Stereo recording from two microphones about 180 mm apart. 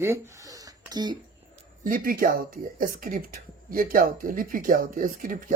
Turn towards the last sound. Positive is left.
turn(degrees=-50)  # may be behind; listen again after turning